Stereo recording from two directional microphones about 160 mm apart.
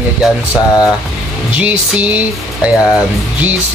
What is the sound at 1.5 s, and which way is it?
Speech, 10° right (ahead or behind).